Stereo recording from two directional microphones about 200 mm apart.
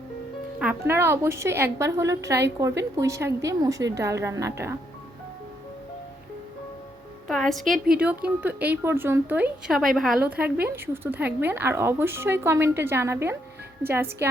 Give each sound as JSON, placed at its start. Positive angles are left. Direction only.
{"t": 0.6, "sound": "a woman's voice", "side_deg": -10}
{"t": 7.3, "sound": "a woman's voice", "side_deg": 0}